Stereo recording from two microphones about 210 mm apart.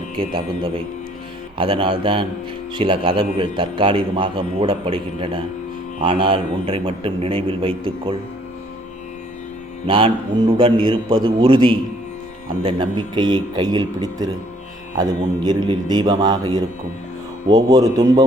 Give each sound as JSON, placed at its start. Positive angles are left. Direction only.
{"t": 0.2, "sound": "a man's voice", "side_deg": -25}
{"t": 9.8, "sound": "a man's voice", "side_deg": -25}
{"t": 15.4, "sound": "a man's voice", "side_deg": -20}